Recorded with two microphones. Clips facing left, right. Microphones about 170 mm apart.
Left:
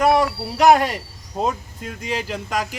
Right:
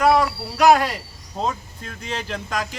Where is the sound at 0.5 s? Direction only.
20° left (ahead or behind).